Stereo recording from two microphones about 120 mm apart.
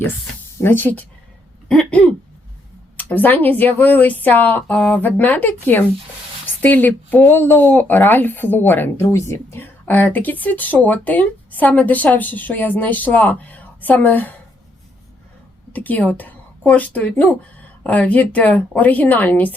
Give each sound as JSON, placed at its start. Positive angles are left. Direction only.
{"t": 0.6, "sound": "speech", "side_deg": 15}
{"t": 1.6, "sound": "hiccup", "side_deg": 5}
{"t": 3.0, "sound": "speech", "side_deg": 15}
{"t": 15.7, "sound": "speech", "side_deg": 15}